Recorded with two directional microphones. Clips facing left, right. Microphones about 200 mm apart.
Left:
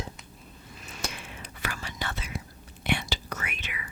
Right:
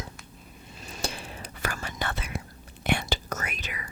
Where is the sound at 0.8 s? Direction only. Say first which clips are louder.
Right 3 dB; 30° right (ahead or behind).